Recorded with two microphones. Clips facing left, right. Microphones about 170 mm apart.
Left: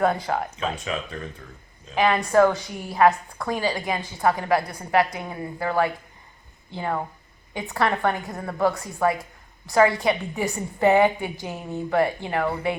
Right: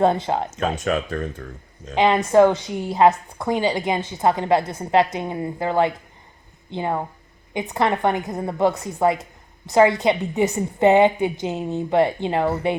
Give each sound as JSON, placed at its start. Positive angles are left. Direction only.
{"t": 0.0, "sound": "a woman's voice", "side_deg": -25}
{"t": 0.5, "sound": "speech", "side_deg": -45}
{"t": 2.0, "sound": "a woman's voice", "side_deg": -20}